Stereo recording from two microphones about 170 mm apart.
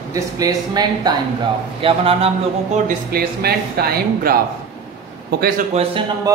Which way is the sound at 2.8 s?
65° right (ahead or behind).